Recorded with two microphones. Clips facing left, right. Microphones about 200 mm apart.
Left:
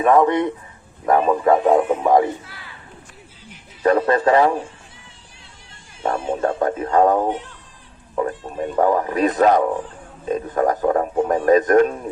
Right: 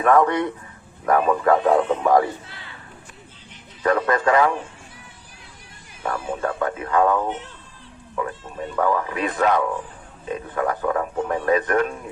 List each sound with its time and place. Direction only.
0.0 s speech: 20° left (ahead or behind)
3.8 s speech: 30° left (ahead or behind)
6.0 s speech: 25° left (ahead or behind)